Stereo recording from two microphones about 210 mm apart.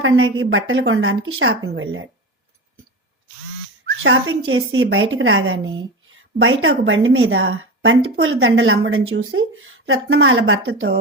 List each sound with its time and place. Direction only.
0.0 s a woman's voice: 65° right (ahead or behind)
4.0 s a woman's voice: 65° right (ahead or behind)